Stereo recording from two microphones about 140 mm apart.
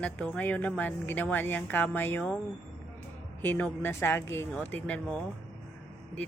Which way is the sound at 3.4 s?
15° left (ahead or behind).